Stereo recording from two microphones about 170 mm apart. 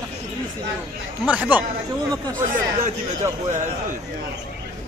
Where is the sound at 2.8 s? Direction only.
45° right (ahead or behind).